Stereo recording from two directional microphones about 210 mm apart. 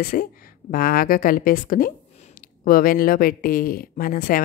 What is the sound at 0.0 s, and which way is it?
Speech, 45° left (ahead or behind).